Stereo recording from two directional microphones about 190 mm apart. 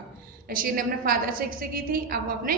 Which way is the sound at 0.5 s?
45° right (ahead or behind).